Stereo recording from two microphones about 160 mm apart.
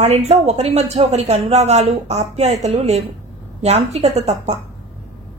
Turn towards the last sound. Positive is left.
turn(degrees=-45)  # may be behind; listen again after turning